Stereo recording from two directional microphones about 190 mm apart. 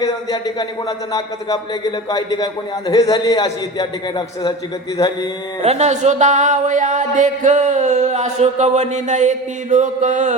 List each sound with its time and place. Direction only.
0.0 s a man's voice: 20° left (ahead or behind)
4.9 s a man's voice: 25° left (ahead or behind)
5.6 s speech: 35° right (ahead or behind)